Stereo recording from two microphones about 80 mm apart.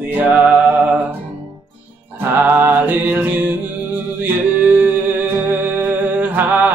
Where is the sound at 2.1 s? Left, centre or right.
Right.